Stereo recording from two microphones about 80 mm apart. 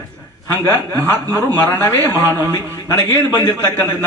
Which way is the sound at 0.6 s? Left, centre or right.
Left.